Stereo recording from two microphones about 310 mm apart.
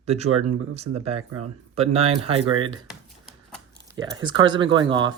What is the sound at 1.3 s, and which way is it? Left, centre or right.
Speech, right.